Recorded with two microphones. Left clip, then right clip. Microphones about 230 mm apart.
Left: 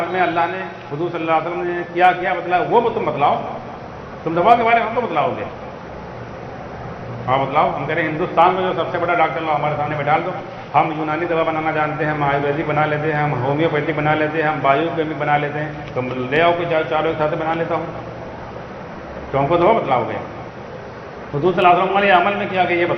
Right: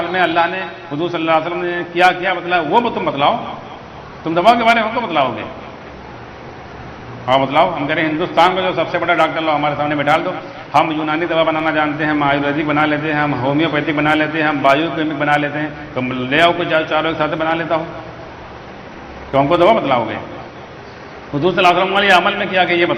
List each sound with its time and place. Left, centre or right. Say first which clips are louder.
0.1 s a man's voice: right 5 dB; right
4.4 s a man's voice: right 2 dB; right
7.3 s a man's voice: right 3 dB; right
19.3 s a man's voice: right 3 dB; right
21.4 s a man's voice: right 1 dB; right